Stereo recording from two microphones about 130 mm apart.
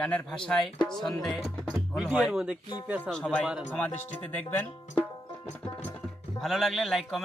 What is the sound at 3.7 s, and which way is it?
Speech, 10° left (ahead or behind).